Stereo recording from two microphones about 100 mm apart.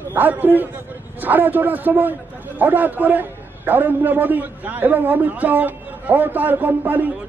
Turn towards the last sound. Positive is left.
turn(degrees=-20)  # may be behind; listen again after turning